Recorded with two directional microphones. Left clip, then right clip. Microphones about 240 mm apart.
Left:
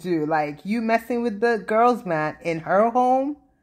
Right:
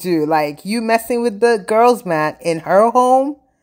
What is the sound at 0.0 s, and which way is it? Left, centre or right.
Speech, right.